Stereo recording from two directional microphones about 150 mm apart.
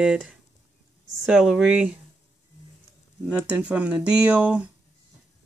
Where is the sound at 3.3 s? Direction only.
10° right (ahead or behind).